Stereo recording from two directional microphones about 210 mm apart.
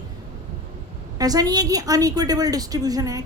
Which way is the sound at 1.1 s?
15° right (ahead or behind).